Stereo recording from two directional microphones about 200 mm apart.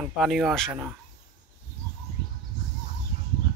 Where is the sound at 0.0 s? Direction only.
Centre (ahead or behind).